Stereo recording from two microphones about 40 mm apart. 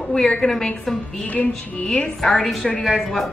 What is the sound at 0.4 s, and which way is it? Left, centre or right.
Speech, centre.